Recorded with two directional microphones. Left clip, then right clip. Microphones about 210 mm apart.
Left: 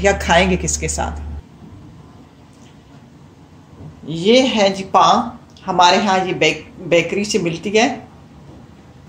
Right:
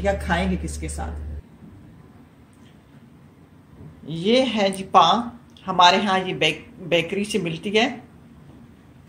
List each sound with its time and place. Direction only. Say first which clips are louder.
0.0 s a woman's voice: left 9 dB; 40° left (ahead or behind)
4.0 s a woman's voice: left 6 dB; 5° left (ahead or behind)